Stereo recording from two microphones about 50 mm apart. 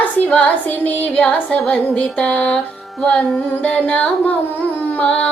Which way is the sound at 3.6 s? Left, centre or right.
Left.